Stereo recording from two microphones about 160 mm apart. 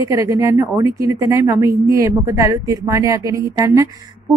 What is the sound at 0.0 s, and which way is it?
A woman's voice, 20° right (ahead or behind).